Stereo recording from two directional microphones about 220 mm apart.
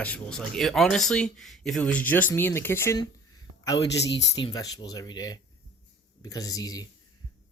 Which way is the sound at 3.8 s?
50° left (ahead or behind).